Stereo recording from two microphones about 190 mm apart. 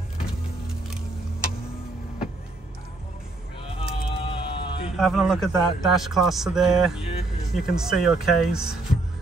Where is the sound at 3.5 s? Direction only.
30° left (ahead or behind).